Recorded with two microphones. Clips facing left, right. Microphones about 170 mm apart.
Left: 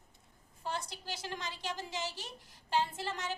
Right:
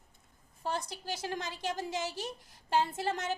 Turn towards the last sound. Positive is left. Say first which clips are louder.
# right 4 dB
turn(degrees=-50)  # may be behind; listen again after turning